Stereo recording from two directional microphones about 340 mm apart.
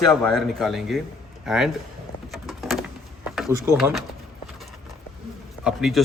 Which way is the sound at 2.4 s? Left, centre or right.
Centre.